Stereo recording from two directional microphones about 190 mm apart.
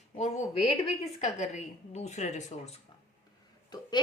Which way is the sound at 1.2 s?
35° left (ahead or behind).